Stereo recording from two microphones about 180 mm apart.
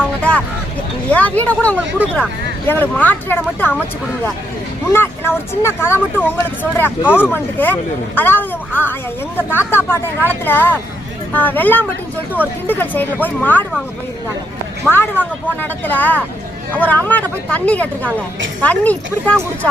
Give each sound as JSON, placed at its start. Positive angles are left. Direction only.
{"t": 0.2, "sound": "a sound", "side_deg": 5}
{"t": 1.1, "sound": "speech", "side_deg": 10}
{"t": 4.9, "sound": "speech", "side_deg": 10}
{"t": 14.8, "sound": "speech", "side_deg": 10}